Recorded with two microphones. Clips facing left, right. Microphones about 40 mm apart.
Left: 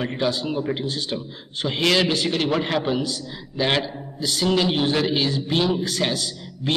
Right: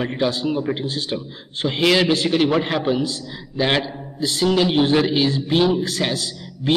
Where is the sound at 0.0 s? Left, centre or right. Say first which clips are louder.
Right 3 dB; centre.